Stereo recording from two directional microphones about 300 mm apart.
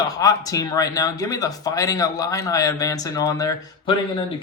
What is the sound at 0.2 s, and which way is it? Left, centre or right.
Speech, centre.